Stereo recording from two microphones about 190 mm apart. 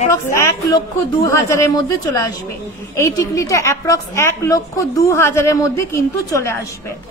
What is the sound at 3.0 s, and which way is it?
A woman's voice, 15° left (ahead or behind).